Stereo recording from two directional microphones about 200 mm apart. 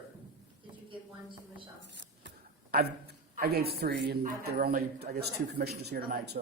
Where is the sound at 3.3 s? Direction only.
50° right (ahead or behind).